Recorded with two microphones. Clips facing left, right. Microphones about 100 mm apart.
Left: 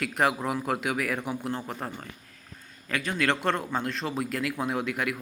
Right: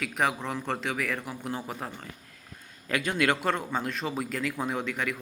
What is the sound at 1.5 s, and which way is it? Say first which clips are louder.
Speech: left 2 dB; 5° right (ahead or behind).